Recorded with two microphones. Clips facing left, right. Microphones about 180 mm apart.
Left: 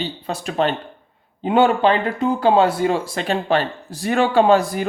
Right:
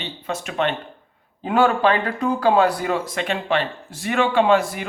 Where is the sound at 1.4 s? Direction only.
25° left (ahead or behind).